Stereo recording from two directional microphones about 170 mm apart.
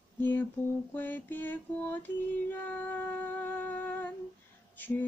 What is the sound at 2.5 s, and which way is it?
Humming, 10° left (ahead or behind).